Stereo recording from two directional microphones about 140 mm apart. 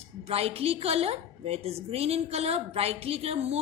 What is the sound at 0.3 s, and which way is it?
A woman's voice, 45° right (ahead or behind).